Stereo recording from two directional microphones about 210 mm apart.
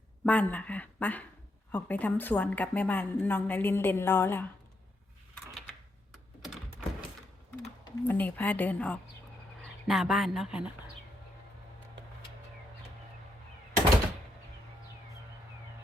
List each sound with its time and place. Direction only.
0.3 s a woman's voice: 5° left (ahead or behind)
7.9 s a woman's voice: 10° left (ahead or behind)